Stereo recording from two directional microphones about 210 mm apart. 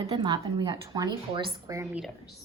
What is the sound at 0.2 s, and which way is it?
A woman's voice, 20° right (ahead or behind).